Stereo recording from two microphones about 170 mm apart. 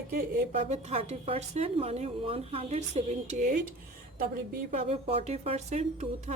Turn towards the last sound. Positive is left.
turn(degrees=-45)  # may be behind; listen again after turning